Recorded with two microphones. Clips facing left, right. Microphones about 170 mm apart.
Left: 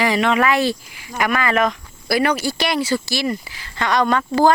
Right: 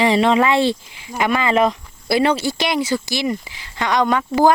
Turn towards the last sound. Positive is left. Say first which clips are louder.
# right 1 dB
turn(degrees=-15)  # may be behind; listen again after turning